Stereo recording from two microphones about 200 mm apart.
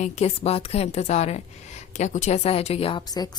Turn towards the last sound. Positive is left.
turn(degrees=20)  # may be behind; listen again after turning